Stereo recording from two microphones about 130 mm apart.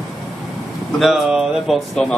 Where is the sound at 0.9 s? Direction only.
Centre (ahead or behind).